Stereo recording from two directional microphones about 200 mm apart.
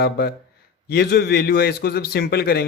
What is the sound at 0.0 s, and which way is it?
A man's voice, 55° left (ahead or behind).